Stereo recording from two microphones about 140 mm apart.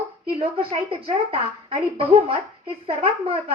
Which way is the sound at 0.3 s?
45° right (ahead or behind).